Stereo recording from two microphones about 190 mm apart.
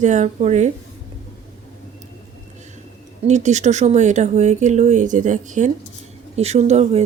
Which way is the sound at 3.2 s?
40° right (ahead or behind).